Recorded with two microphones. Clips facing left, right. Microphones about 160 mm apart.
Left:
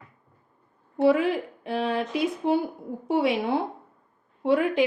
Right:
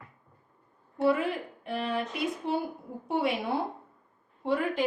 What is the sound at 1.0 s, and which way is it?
Speech, 90° left.